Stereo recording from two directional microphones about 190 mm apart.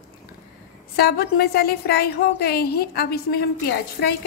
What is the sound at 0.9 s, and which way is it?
A woman's voice, 55° left (ahead or behind).